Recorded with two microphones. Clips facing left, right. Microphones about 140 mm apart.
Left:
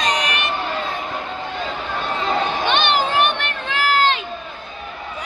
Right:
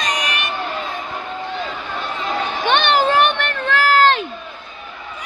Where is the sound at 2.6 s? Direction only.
55° right (ahead or behind).